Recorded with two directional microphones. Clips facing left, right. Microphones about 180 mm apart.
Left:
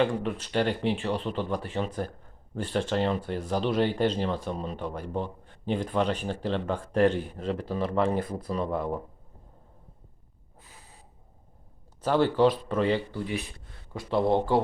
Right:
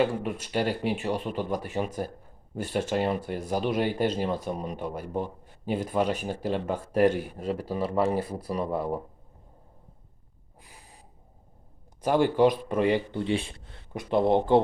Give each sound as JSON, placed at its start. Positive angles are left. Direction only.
{"t": 0.0, "sound": "speech", "side_deg": -10}
{"t": 10.6, "sound": "snort", "side_deg": -15}
{"t": 12.0, "sound": "a man's voice", "side_deg": -10}